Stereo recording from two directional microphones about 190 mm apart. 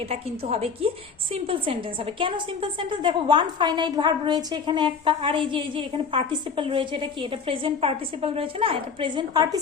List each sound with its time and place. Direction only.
0.1 s a woman's voice: 30° right (ahead or behind)